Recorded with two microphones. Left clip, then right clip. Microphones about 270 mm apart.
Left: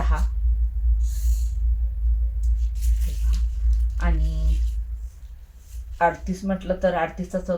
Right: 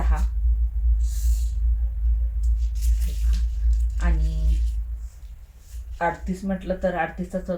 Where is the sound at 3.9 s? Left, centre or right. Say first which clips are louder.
Left 2 dB; centre.